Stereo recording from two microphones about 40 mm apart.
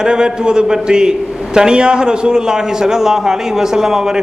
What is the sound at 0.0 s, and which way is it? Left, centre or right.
A man's voice, right.